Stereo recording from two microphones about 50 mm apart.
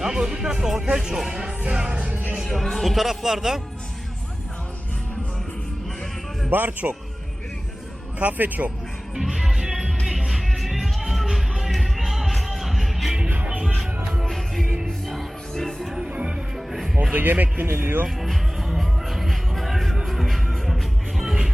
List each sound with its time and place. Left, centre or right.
0.0 s speech: centre
1.6 s music: centre
2.4 s speech: centre
6.5 s speech: right
8.2 s speech: right
9.1 s music: centre
13.3 s music: right
14.3 s music: centre
16.0 s music: right
16.6 s music: centre
17.0 s speech: right
18.2 s music: centre